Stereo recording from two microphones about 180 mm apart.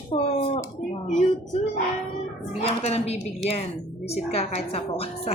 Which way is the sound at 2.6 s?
35° left (ahead or behind).